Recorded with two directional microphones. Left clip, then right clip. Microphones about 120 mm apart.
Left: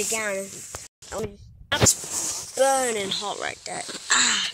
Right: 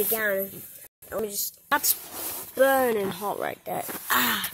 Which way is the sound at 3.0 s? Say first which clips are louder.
Left 1 dB; 30° right (ahead or behind).